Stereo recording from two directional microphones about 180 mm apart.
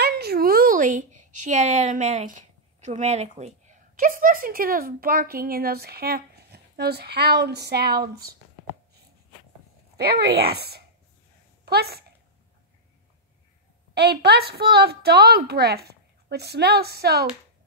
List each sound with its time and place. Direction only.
0.0 s a woman's voice: 60° right (ahead or behind)
9.9 s a woman's voice: 60° right (ahead or behind)
13.9 s a woman's voice: 65° right (ahead or behind)